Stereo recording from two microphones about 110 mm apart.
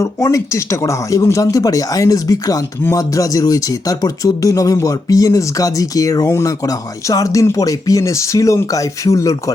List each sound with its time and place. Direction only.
0.0 s speech: 30° left (ahead or behind)